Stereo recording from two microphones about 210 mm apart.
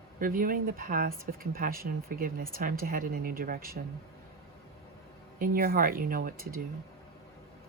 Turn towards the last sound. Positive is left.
turn(degrees=-45)  # may be behind; listen again after turning